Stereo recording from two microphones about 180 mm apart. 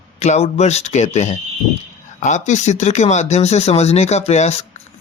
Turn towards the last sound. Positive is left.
turn(degrees=35)  # may be behind; listen again after turning